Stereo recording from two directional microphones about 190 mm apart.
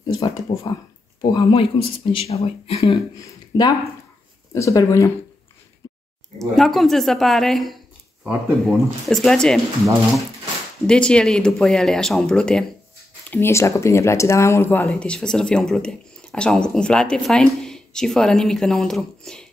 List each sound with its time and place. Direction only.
0.0 s a sound: 20° left (ahead or behind)
1.2 s speech: 25° left (ahead or behind)
6.5 s speech: centre (ahead or behind)
10.9 s speech: 5° left (ahead or behind)